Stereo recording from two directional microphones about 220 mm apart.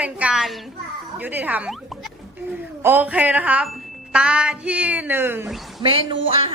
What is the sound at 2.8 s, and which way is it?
Music, 10° right (ahead or behind).